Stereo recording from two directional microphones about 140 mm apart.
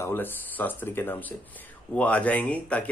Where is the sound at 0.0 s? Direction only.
15° left (ahead or behind).